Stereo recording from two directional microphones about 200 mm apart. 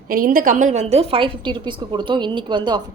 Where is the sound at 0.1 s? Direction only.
45° right (ahead or behind).